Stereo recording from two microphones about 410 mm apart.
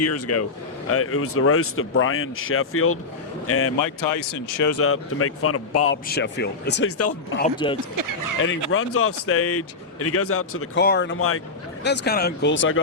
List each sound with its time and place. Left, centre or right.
0.0 s speech: left
3.8 s speech: left
7.3 s speech: centre
7.9 s speech: right
8.7 s speech: left